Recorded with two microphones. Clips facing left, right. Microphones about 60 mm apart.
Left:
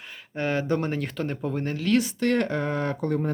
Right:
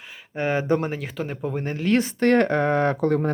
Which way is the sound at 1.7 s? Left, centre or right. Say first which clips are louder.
Right 2 dB; right.